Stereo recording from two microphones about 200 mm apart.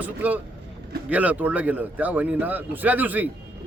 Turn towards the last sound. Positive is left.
turn(degrees=-10)  # may be behind; listen again after turning